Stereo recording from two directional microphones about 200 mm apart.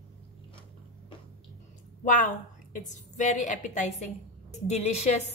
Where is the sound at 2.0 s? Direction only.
40° left (ahead or behind).